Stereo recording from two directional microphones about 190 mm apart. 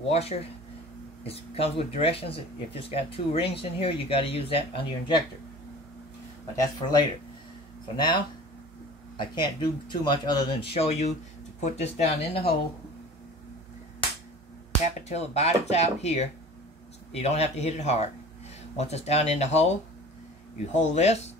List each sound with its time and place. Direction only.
0.1 s speech: 30° left (ahead or behind)
6.5 s speech: 20° left (ahead or behind)
10.7 s speech: 35° left (ahead or behind)
15.0 s speech: 35° left (ahead or behind)
20.7 s speech: 35° left (ahead or behind)